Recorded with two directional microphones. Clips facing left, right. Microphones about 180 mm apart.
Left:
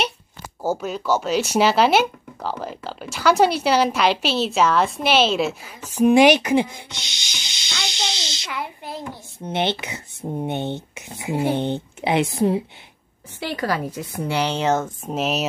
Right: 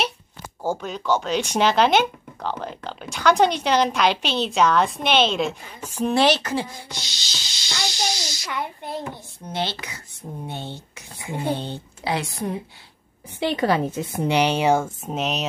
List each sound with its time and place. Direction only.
0.6 s speech: 5° left (ahead or behind); by 8.5 s 25° left (ahead or behind)
8.5 s speech: centre (ahead or behind)
9.4 s speech: 20° left (ahead or behind)
13.4 s a woman's voice: 20° right (ahead or behind)
15.0 s speech: centre (ahead or behind)